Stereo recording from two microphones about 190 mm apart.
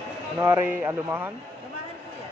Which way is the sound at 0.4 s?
15° right (ahead or behind).